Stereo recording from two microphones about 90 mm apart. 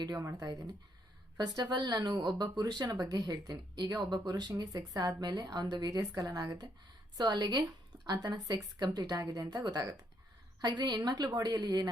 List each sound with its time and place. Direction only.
0.2 s speech: 35° right (ahead or behind)